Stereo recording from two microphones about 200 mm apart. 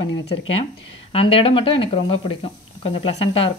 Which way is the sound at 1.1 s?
30° left (ahead or behind).